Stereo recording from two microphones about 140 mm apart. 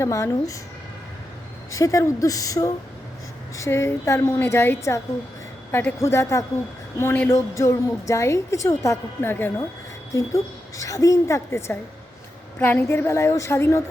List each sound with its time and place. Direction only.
0.0 s a woman's voice: 20° left (ahead or behind)
1.7 s a woman's voice: 25° left (ahead or behind)